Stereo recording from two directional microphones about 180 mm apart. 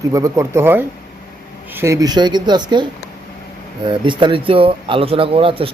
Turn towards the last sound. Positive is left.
turn(degrees=-30)  # may be behind; listen again after turning